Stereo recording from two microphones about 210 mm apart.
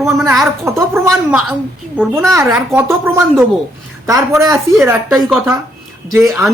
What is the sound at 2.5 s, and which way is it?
A woman's voice, 10° right (ahead or behind).